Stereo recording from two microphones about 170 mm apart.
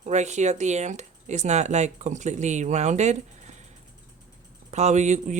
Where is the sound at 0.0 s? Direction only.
40° right (ahead or behind).